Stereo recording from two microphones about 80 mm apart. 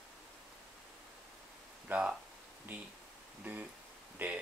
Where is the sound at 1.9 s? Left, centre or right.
Right.